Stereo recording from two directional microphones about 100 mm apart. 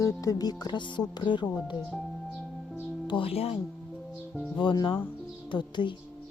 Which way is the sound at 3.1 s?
70° left (ahead or behind).